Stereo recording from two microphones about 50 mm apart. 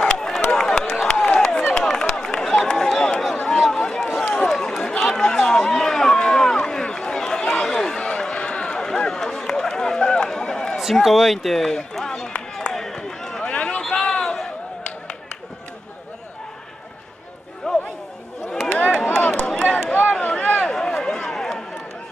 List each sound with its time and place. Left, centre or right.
0.0 s a sound: centre
3.4 s chatter: centre
4.2 s run: left
4.6 s run: centre
10.8 s run: centre
13.5 s run: left
13.7 s a sound: centre
17.6 s chatter: centre
18.7 s a sound: left
20.6 s run: centre